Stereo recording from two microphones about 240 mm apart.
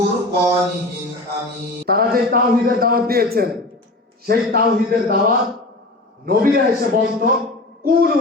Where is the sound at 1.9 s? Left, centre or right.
Right.